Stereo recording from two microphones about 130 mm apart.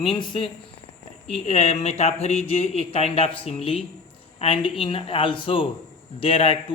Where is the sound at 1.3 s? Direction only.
55° left (ahead or behind).